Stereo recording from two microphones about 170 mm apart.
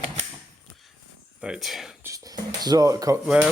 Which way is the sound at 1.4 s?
Centre (ahead or behind).